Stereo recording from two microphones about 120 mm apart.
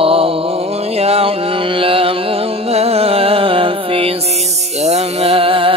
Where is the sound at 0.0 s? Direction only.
50° right (ahead or behind).